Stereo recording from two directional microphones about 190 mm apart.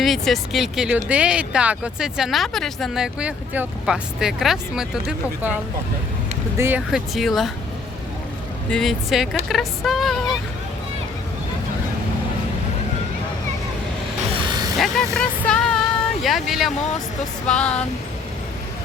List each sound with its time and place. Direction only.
0.0 s speech: centre (ahead or behind)
6.6 s speech: 10° right (ahead or behind)
8.7 s speech: centre (ahead or behind)
14.3 s a sound: 25° right (ahead or behind)
14.8 s speech: centre (ahead or behind)